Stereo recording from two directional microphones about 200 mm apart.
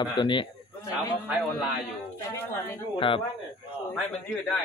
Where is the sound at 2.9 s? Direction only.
25° left (ahead or behind).